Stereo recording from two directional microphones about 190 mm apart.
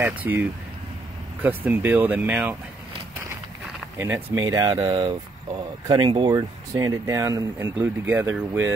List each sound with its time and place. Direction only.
0.0 s speech: 10° right (ahead or behind)
1.4 s speech: 10° right (ahead or behind)
4.0 s speech: 15° right (ahead or behind)